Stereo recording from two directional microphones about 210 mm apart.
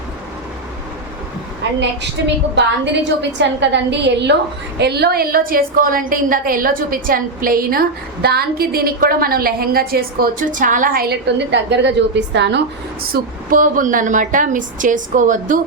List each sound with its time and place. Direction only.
2.0 s a woman's voice: 55° right (ahead or behind); by 15.5 s 40° right (ahead or behind)